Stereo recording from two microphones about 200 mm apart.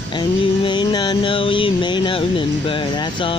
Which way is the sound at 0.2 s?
25° left (ahead or behind).